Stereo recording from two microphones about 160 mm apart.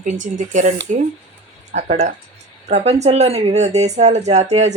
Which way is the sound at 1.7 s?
45° right (ahead or behind).